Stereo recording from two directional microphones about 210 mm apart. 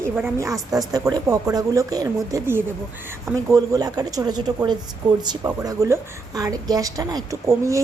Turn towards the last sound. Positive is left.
turn(degrees=-15)  # may be behind; listen again after turning